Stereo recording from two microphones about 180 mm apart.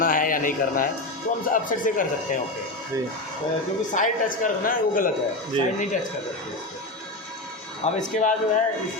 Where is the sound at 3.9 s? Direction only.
45° left (ahead or behind).